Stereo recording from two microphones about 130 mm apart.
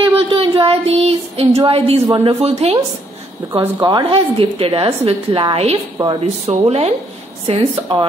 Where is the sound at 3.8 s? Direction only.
40° right (ahead or behind).